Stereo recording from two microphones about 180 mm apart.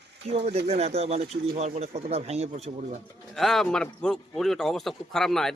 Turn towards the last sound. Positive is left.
turn(degrees=0)  # may be behind; listen again after turning